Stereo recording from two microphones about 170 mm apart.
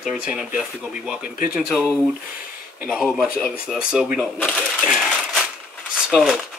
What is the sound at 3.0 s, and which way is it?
Speech, 5° right (ahead or behind).